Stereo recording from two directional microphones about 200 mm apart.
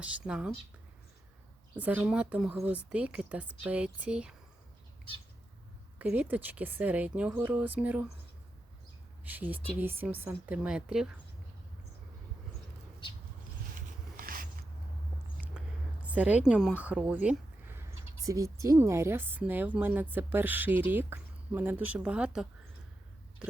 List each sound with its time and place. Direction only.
0.0 s speech: 5° right (ahead or behind)
1.7 s speech: 5° right (ahead or behind)
6.0 s speech: 10° right (ahead or behind)
9.2 s speech: 10° right (ahead or behind)
13.7 s a sound: 45° right (ahead or behind)
15.5 s speech: 5° right (ahead or behind)
23.4 s biting: 5° right (ahead or behind)